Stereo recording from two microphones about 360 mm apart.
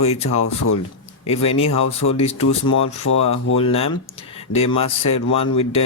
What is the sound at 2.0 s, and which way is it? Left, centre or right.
Speech, left.